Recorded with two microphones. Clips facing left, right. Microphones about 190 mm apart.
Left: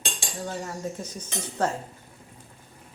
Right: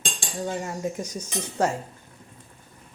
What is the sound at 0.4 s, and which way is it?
A woman's voice, 15° right (ahead or behind).